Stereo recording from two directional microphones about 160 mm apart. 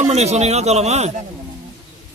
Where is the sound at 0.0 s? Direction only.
45° right (ahead or behind).